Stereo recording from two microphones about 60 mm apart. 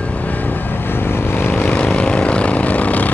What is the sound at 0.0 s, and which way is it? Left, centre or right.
Vehicle, left.